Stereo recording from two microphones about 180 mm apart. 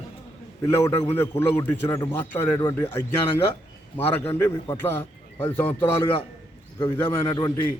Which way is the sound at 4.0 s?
15° left (ahead or behind).